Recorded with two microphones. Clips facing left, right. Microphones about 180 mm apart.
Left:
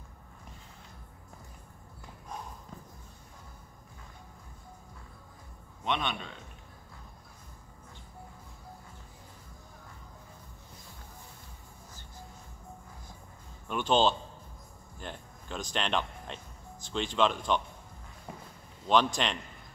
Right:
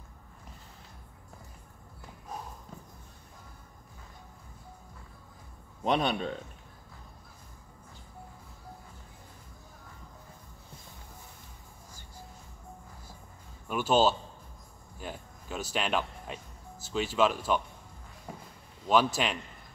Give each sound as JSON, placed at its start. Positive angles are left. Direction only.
{"t": 5.9, "sound": "a man's voice", "side_deg": -40}
{"t": 13.7, "sound": "speech", "side_deg": -5}
{"t": 18.9, "sound": "speech", "side_deg": -5}